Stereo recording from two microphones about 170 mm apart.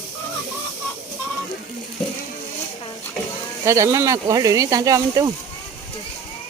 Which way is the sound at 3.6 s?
15° right (ahead or behind).